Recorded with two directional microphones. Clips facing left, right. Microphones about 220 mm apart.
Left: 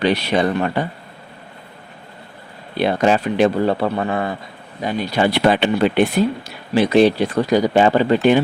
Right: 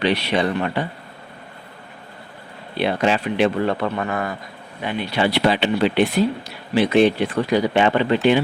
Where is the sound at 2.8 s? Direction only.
45° left (ahead or behind).